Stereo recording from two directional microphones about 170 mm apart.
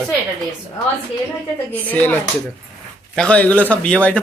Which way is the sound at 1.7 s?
10° left (ahead or behind).